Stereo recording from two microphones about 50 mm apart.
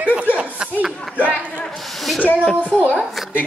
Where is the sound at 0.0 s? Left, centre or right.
Right.